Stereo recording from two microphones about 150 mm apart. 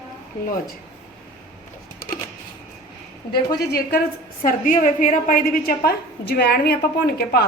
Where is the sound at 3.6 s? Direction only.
90° left.